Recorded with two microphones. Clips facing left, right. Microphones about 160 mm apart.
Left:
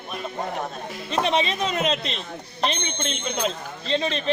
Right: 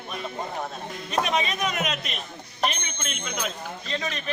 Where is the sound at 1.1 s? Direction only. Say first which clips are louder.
Left 3 dB; 30° left (ahead or behind).